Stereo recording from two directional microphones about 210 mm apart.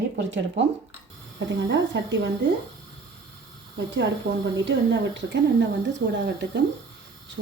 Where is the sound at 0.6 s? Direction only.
60° right (ahead or behind).